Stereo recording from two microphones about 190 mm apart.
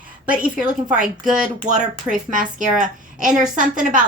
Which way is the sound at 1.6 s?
40° right (ahead or behind).